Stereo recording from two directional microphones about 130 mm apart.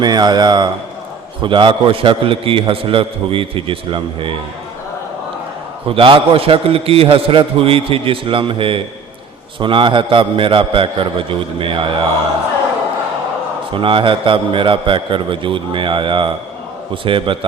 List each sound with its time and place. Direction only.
0.0 s a man's voice: 35° right (ahead or behind)
5.9 s a man's voice: 40° right (ahead or behind)
13.7 s a man's voice: 40° right (ahead or behind)